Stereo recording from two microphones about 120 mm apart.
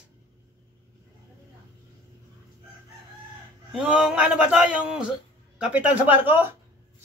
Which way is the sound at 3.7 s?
5° right (ahead or behind).